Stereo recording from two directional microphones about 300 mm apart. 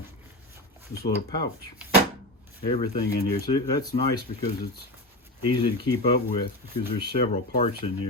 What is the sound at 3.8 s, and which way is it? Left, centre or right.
Speech, centre.